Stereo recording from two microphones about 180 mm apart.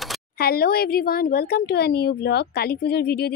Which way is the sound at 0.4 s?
60° left (ahead or behind).